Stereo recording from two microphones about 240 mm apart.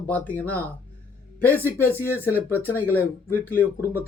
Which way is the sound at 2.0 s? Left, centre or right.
Left.